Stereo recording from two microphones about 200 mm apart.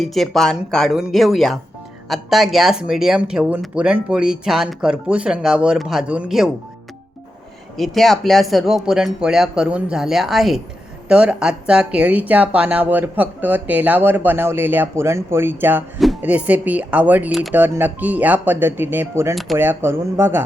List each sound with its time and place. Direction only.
0.0 s speech: centre (ahead or behind)
7.8 s speech: centre (ahead or behind)
19.3 s speech: centre (ahead or behind)
19.5 s speech: 10° right (ahead or behind)